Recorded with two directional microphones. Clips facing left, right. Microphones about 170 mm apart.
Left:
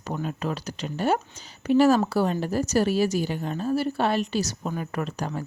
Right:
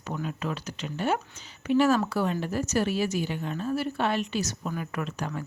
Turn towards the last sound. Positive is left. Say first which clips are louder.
# left 3 dB
turn(degrees=35)  # may be behind; listen again after turning